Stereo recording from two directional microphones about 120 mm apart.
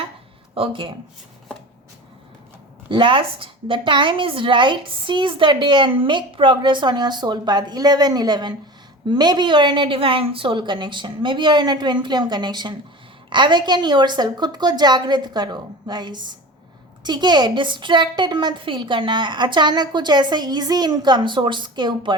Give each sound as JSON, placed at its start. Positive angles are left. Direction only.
{"t": 0.5, "sound": "speech", "side_deg": -50}
{"t": 2.9, "sound": "a woman's voice", "side_deg": -45}